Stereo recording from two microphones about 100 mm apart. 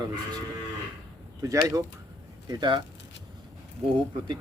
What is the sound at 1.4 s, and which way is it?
Speech, 35° right (ahead or behind).